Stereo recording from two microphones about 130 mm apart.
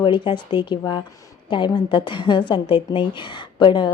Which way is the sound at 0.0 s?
40° left (ahead or behind).